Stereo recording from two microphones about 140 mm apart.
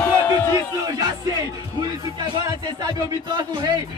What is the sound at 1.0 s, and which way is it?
Music, 30° right (ahead or behind).